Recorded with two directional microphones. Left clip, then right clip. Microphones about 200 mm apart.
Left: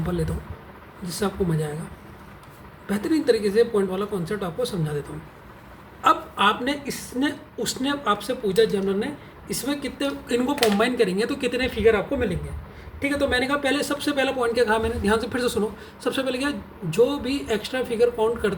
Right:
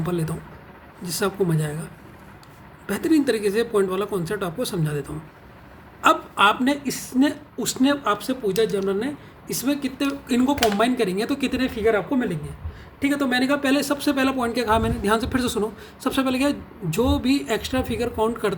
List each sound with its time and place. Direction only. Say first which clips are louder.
0.0 s speech: right 1 dB; 40° right (ahead or behind)
2.8 s speech: right 1 dB; 45° right (ahead or behind)
6.0 s a woman's voice: right 2 dB; 45° right (ahead or behind)